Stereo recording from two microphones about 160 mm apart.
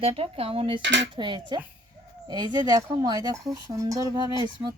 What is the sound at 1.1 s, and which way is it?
Speech, 30° right (ahead or behind).